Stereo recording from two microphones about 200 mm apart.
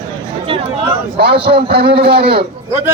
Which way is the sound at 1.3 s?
25° right (ahead or behind).